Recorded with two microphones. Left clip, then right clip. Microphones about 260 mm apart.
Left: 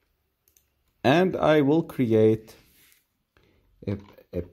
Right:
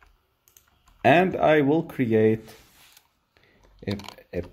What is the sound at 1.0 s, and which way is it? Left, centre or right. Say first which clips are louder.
Speech: right 2 dB; left.